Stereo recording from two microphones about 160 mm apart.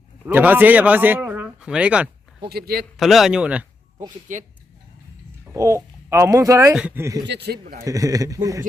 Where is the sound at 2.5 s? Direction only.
75° right (ahead or behind).